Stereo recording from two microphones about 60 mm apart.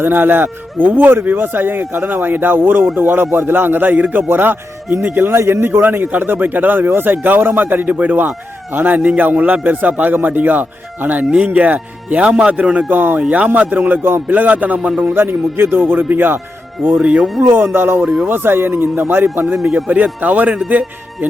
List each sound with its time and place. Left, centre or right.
0.0 s a man's voice: right
15.1 s a man's voice: right
17.0 s a man's voice: centre
17.5 s a man's voice: right
19.7 s a man's voice: right